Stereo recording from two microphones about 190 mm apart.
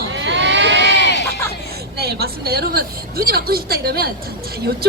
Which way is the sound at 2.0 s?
55° right (ahead or behind).